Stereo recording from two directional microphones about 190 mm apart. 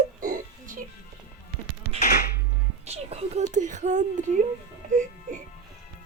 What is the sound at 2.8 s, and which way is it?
Speech, 35° right (ahead or behind).